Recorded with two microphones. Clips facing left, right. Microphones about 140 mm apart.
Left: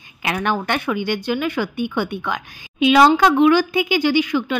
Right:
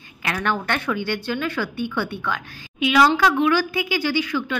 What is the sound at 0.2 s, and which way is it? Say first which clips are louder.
Speech: left 3 dB; 15° left (ahead or behind).